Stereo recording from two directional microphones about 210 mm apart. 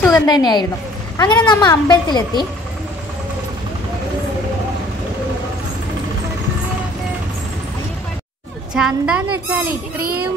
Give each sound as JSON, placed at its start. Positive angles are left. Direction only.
{"t": 0.0, "sound": "a woman's voice", "side_deg": 15}
{"t": 8.7, "sound": "a woman's voice", "side_deg": -5}